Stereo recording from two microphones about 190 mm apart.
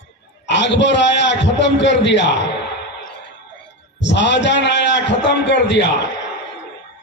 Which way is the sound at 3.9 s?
70° left (ahead or behind).